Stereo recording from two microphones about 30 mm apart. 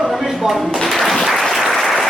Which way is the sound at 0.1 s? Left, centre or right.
Centre.